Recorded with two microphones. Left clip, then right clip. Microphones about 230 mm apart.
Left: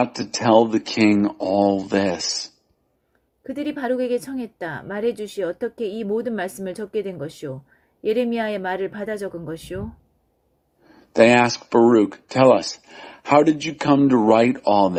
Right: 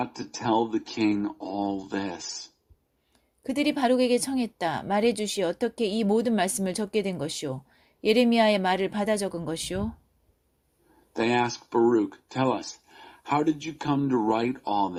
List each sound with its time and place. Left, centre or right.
0.0 s speech: left
3.4 s speech: right
11.1 s speech: left